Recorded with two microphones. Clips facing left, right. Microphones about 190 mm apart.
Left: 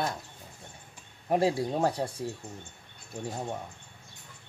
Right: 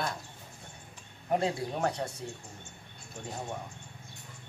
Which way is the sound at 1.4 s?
30° left (ahead or behind).